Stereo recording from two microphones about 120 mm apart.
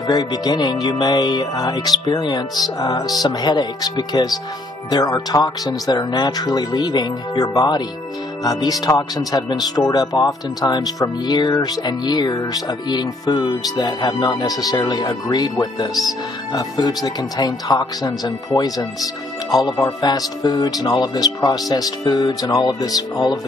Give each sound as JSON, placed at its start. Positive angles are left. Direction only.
{"t": 0.0, "sound": "speech", "side_deg": 35}